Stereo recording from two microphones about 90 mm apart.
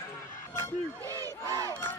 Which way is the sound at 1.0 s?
40° right (ahead or behind).